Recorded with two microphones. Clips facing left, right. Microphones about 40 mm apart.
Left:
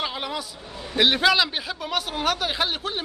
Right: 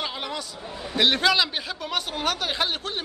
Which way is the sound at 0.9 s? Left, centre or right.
Centre.